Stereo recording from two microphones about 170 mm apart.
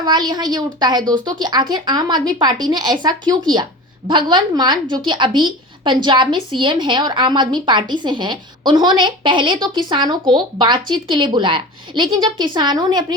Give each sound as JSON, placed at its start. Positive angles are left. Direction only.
{"t": 0.0, "sound": "a woman's voice", "side_deg": -25}